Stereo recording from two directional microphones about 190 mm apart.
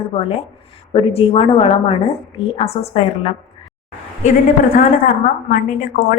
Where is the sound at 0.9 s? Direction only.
30° left (ahead or behind).